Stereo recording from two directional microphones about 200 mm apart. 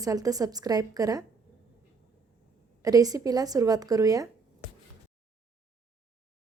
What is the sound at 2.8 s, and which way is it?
A woman's voice, 20° right (ahead or behind).